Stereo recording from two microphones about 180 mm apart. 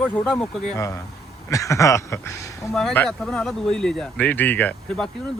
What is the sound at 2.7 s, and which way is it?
Speech, 5° left (ahead or behind).